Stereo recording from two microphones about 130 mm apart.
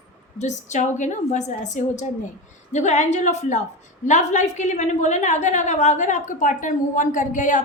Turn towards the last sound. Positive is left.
turn(degrees=80)